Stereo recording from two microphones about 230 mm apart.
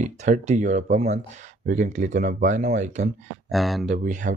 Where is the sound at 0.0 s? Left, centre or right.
Right.